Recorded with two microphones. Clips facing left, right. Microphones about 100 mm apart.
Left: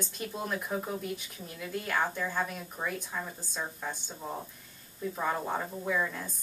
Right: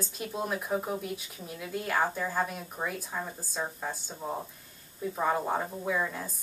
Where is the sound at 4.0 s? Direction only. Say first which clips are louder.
Right 3 dB; centre (ahead or behind).